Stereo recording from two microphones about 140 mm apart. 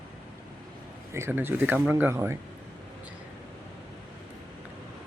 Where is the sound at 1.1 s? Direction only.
15° right (ahead or behind).